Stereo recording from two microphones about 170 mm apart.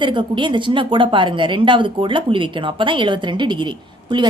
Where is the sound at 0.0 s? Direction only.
30° right (ahead or behind).